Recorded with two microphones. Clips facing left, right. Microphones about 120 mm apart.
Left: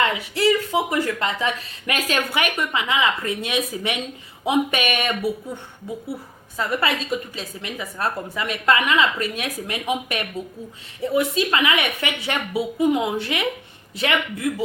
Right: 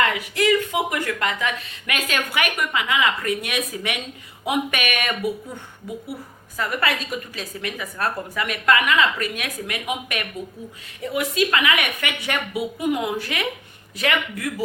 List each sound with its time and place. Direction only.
0.0 s speech: 30° left (ahead or behind)
6.6 s speech: 25° left (ahead or behind)